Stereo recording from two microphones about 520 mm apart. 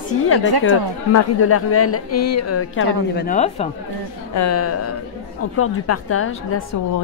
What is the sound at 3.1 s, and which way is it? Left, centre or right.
Speech, centre.